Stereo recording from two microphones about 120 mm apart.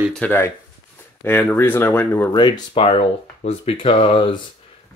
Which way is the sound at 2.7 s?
55° left (ahead or behind).